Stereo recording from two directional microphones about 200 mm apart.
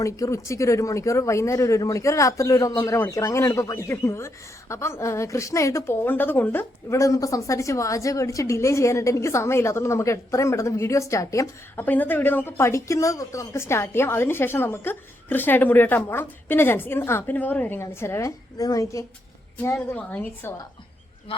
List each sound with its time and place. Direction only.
0.0 s a woman's voice: 15° left (ahead or behind)